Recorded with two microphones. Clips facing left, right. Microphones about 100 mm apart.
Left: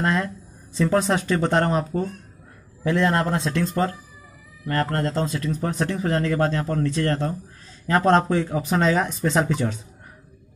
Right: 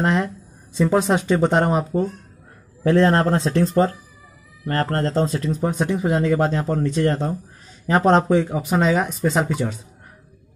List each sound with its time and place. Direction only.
0.0 s speech: 20° right (ahead or behind)
2.8 s speech: 35° right (ahead or behind); by 9.8 s 5° right (ahead or behind)